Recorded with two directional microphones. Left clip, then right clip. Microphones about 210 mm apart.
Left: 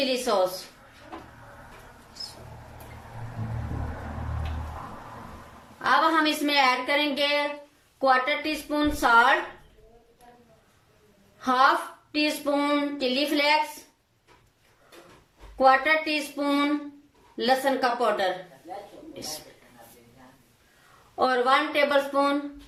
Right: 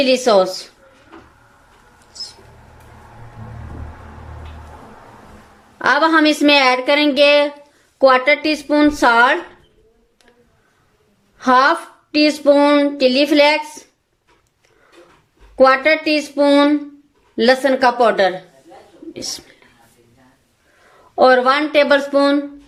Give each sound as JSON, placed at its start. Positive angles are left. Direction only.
{"t": 0.0, "sound": "a woman's voice", "side_deg": -50}
{"t": 5.8, "sound": "a woman's voice", "side_deg": -50}
{"t": 11.3, "sound": "a woman's voice", "side_deg": -50}
{"t": 15.5, "sound": "a woman's voice", "side_deg": -50}
{"t": 21.2, "sound": "a woman's voice", "side_deg": -45}